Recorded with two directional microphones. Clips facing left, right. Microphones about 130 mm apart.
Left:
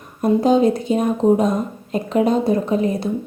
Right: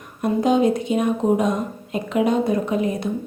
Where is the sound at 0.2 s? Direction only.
35° left (ahead or behind).